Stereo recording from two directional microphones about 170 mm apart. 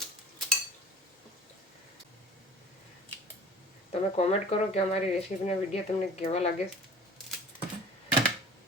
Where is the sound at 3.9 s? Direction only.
40° left (ahead or behind).